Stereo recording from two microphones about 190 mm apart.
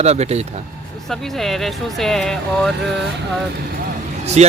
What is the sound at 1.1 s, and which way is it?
Speech, centre (ahead or behind).